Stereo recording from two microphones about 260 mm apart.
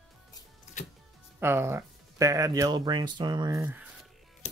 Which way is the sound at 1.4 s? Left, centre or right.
Centre.